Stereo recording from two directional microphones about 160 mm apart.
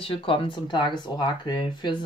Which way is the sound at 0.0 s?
35° left (ahead or behind).